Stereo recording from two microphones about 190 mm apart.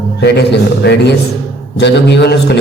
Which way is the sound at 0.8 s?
55° left (ahead or behind).